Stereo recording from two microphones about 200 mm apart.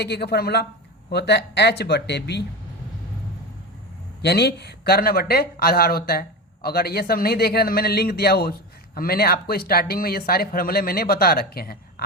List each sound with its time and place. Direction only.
0.0 s speech: 55° left (ahead or behind)
4.2 s speech: 55° left (ahead or behind)